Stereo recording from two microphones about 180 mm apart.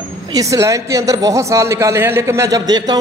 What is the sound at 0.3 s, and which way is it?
A woman's voice, 20° right (ahead or behind).